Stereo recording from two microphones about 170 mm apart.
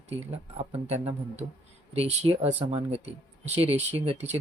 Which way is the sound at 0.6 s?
40° right (ahead or behind).